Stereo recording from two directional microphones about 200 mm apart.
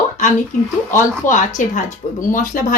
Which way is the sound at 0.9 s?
40° left (ahead or behind).